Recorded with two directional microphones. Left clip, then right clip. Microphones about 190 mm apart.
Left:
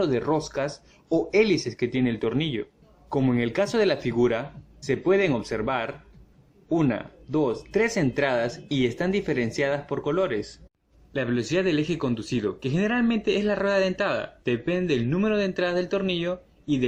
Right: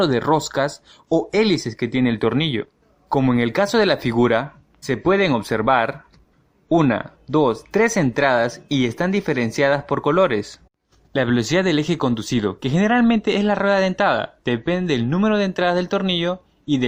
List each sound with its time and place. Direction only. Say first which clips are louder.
0.0 s speech: right 6 dB; 40° right (ahead or behind)